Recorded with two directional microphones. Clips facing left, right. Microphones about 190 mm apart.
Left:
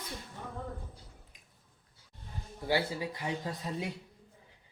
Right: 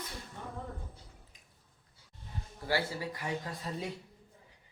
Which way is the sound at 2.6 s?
20° left (ahead or behind).